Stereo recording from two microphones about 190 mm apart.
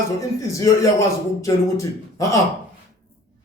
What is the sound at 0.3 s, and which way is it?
A man's voice, 15° left (ahead or behind).